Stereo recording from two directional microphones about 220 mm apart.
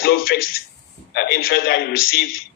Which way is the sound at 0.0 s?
45° left (ahead or behind).